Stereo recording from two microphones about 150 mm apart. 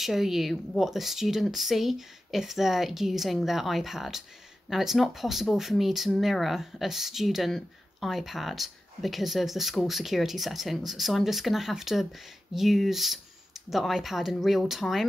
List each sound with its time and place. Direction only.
0.0 s speech: centre (ahead or behind)